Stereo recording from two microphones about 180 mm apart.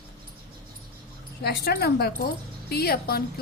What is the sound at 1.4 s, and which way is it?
Speech, 60° left (ahead or behind).